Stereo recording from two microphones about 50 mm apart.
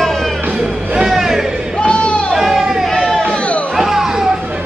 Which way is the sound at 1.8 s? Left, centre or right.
Left.